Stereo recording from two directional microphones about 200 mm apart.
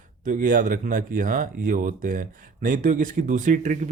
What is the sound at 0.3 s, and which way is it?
Speech, 40° right (ahead or behind).